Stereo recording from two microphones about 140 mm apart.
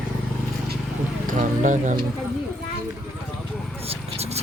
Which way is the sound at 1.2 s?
65° right (ahead or behind).